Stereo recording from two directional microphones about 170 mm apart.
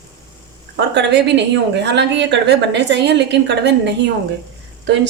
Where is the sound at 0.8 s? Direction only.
90° right.